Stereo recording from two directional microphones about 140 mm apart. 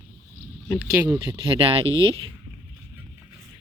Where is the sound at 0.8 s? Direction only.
25° right (ahead or behind).